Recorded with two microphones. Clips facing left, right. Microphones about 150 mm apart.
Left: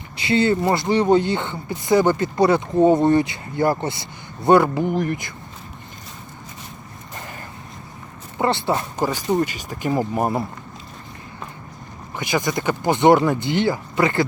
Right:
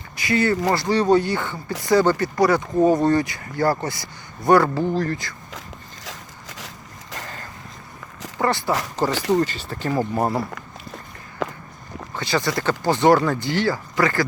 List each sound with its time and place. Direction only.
0.2 s speech: 25° left (ahead or behind)
8.4 s speech: 25° left (ahead or behind)
9.5 s speech: 15° left (ahead or behind)
11.4 s walk: 90° right
12.1 s speech: 15° left (ahead or behind)